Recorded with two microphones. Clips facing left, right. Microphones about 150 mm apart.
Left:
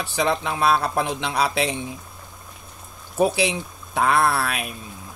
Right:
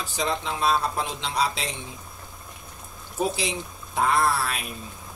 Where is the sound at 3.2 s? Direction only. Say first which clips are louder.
Left 6 dB; 65° left (ahead or behind).